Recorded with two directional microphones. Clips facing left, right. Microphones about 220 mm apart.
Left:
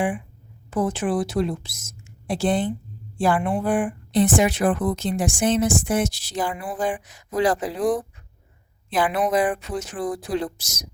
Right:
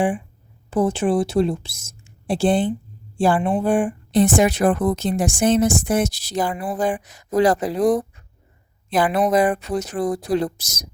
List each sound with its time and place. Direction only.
0.7 s a woman's voice: 30° right (ahead or behind)
4.1 s speech: 40° right (ahead or behind)